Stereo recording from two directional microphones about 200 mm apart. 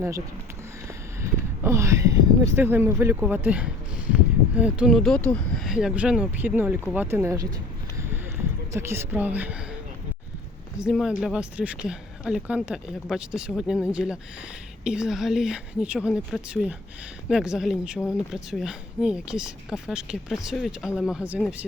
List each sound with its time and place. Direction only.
1.2 s speech: 15° right (ahead or behind)
8.7 s speech: 10° right (ahead or behind)
10.8 s speech: 5° right (ahead or behind)